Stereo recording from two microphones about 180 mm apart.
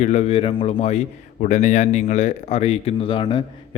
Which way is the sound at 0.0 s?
40° left (ahead or behind).